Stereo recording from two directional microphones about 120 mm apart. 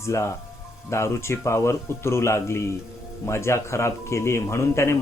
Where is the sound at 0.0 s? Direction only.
25° left (ahead or behind).